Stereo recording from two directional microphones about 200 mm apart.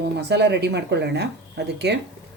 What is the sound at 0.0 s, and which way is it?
Speech, 55° right (ahead or behind).